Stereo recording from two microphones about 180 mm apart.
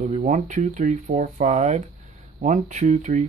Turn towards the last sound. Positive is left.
turn(degrees=-45)  # may be behind; listen again after turning